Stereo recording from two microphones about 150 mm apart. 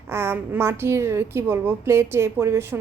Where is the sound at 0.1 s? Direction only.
15° right (ahead or behind).